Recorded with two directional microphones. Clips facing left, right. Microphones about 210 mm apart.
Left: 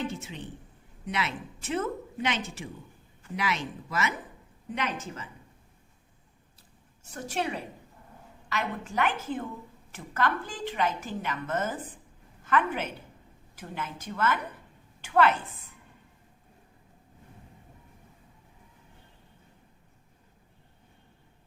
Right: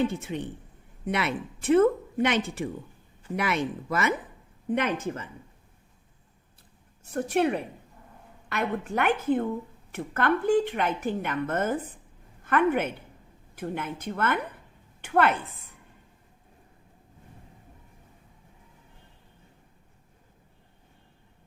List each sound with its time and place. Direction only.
0.1 s a woman's voice: 55° right (ahead or behind)
7.0 s a woman's voice: 60° right (ahead or behind)